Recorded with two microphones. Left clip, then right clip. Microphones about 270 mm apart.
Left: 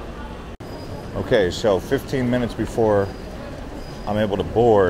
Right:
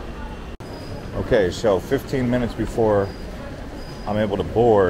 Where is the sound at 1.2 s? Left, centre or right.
Centre.